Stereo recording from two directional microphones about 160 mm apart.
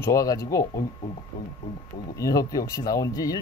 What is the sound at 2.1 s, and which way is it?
Speech, 20° left (ahead or behind).